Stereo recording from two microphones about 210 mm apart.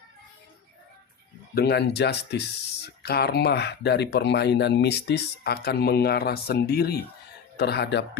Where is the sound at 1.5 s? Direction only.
50° left (ahead or behind).